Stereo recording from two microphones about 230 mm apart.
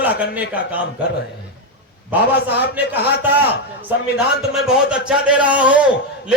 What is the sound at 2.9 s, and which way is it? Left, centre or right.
Speech, centre.